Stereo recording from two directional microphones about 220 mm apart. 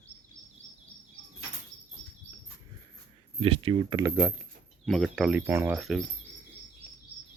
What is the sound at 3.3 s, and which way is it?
Speech, 25° right (ahead or behind).